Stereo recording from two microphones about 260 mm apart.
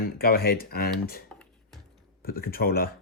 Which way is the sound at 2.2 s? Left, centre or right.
Left.